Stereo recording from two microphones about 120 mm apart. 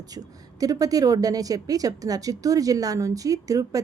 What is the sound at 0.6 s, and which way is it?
A woman's voice, 30° right (ahead or behind).